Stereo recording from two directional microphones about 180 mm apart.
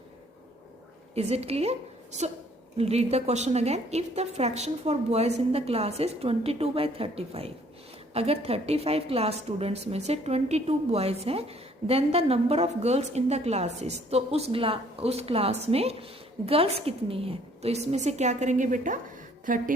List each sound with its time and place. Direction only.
1.1 s a woman's voice: 35° right (ahead or behind)
2.7 s a woman's voice: 35° right (ahead or behind)